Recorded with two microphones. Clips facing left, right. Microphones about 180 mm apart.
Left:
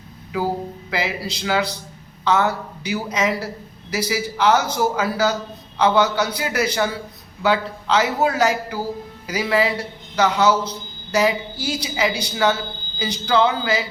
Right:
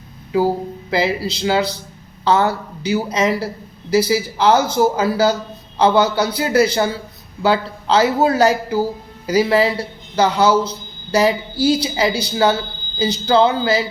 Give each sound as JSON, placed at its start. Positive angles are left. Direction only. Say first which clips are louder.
{"t": 0.3, "sound": "a man's voice", "louder": "right 6 dB", "side_deg": -30}